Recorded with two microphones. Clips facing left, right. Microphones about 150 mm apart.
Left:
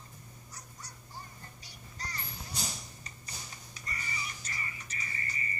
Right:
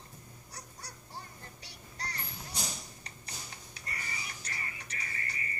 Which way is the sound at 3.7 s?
65° right (ahead or behind).